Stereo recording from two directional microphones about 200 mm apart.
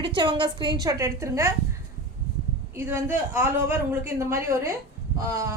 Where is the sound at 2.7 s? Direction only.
10° right (ahead or behind).